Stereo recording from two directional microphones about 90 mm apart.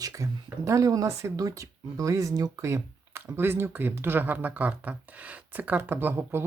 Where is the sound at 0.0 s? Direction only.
35° right (ahead or behind).